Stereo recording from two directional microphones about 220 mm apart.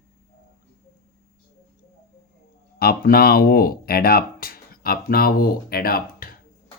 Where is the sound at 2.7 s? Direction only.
40° left (ahead or behind).